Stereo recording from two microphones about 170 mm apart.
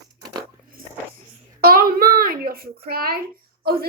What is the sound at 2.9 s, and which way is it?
Speech, 60° right (ahead or behind).